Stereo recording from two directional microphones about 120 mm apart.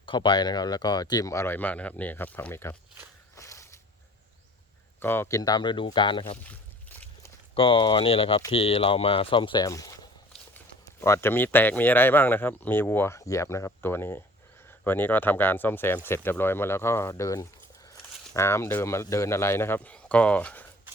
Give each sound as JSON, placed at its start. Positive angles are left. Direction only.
{"t": 0.0, "sound": "speech", "side_deg": 40}
{"t": 3.3, "sound": "a sound", "side_deg": 25}
{"t": 4.9, "sound": "speech", "side_deg": 20}
{"t": 5.4, "sound": "speech", "side_deg": 35}
{"t": 7.5, "sound": "speech", "side_deg": 45}
{"t": 9.6, "sound": "speech", "side_deg": 30}